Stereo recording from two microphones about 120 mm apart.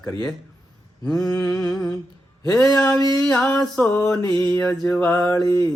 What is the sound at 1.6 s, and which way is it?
Humming, 30° left (ahead or behind).